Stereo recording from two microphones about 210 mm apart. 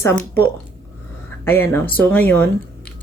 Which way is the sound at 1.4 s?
10° left (ahead or behind).